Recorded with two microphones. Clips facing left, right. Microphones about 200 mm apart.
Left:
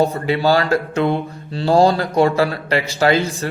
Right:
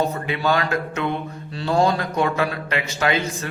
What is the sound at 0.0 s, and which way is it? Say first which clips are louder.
A man's voice: left 6 dB; 30° left (ahead or behind).